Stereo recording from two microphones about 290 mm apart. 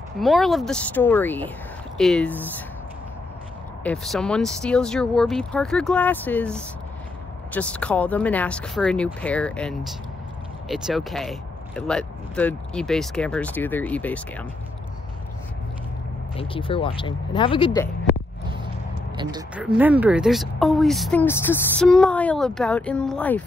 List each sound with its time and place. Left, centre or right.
0.2 s speech: centre
3.8 s speech: centre
16.3 s speech: centre
19.5 s speech: centre